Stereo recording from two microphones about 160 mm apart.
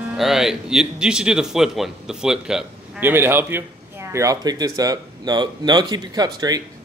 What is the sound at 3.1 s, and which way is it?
Speech, 15° right (ahead or behind).